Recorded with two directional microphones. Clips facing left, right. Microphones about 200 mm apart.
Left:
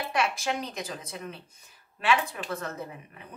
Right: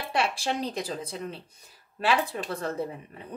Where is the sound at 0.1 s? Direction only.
30° right (ahead or behind).